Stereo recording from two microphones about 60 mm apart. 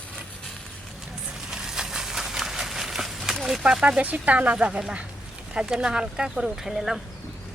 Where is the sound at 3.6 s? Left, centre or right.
Centre.